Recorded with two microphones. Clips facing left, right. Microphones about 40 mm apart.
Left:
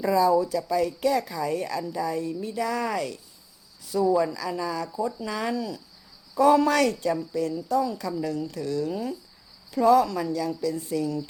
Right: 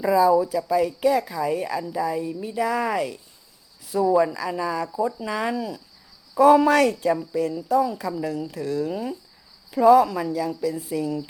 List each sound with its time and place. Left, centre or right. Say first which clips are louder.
0.0 s a woman's voice: right 3 dB; centre